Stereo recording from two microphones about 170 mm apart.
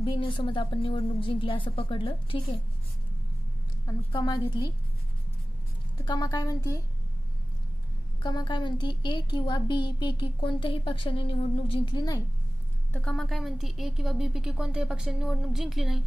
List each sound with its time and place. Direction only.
0.0 s a woman's voice: 30° left (ahead or behind)
3.8 s a woman's voice: 25° left (ahead or behind)
6.0 s a woman's voice: 25° left (ahead or behind)
8.2 s a woman's voice: 25° left (ahead or behind)
12.9 s a woman's voice: 5° left (ahead or behind)